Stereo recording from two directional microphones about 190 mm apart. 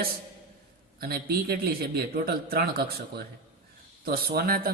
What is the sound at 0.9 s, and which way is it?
Speech, 55° right (ahead or behind).